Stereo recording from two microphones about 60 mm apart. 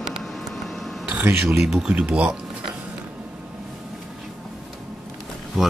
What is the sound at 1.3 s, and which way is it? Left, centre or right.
Speech, right.